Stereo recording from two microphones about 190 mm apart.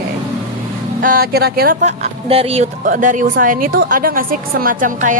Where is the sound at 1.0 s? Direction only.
50° right (ahead or behind).